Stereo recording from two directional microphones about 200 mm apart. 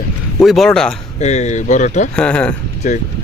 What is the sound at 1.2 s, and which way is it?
Speech, 35° left (ahead or behind).